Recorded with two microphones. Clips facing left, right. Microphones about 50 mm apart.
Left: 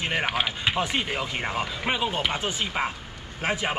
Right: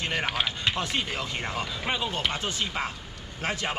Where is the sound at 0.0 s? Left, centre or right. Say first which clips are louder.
Left 2 dB; centre.